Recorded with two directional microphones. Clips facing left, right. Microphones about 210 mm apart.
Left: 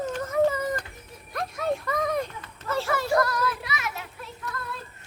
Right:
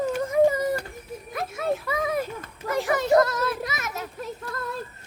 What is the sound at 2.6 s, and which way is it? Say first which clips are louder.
Children playing: right 3 dB; 15° right (ahead or behind).